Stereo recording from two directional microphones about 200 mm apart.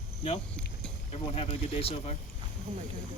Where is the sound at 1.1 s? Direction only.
30° left (ahead or behind).